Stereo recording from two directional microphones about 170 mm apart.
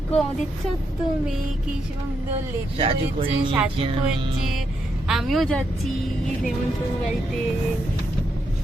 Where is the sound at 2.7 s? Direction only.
35° right (ahead or behind).